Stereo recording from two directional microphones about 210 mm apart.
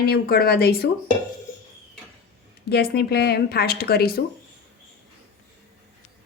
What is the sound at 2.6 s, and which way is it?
Speech, 50° left (ahead or behind).